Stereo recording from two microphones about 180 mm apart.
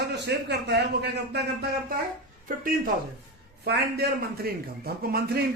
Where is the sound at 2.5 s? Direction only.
50° right (ahead or behind).